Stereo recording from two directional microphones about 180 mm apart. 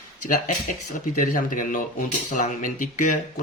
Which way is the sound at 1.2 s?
50° left (ahead or behind).